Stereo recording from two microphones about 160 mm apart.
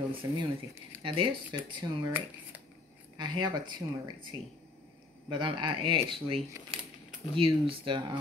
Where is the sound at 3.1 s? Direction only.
30° right (ahead or behind).